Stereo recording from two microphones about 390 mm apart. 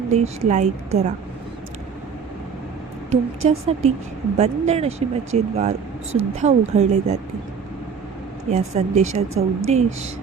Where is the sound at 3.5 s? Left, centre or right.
Centre.